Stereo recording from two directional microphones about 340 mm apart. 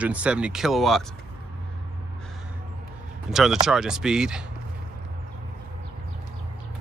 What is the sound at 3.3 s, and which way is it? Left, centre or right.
Speech, centre.